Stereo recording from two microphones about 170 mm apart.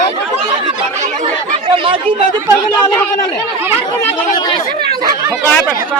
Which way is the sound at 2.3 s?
15° left (ahead or behind).